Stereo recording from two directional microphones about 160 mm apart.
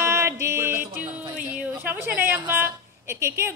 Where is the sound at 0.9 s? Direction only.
10° right (ahead or behind).